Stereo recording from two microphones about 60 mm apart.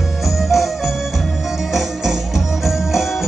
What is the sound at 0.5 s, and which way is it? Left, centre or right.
Music, centre.